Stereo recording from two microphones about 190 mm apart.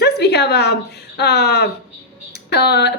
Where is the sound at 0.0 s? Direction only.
60° left (ahead or behind).